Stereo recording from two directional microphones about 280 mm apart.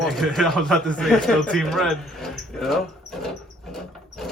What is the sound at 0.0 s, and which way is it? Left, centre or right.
Speech, centre.